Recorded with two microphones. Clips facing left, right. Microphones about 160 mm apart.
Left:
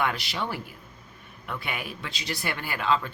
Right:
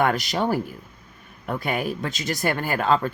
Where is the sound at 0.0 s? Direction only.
45° right (ahead or behind).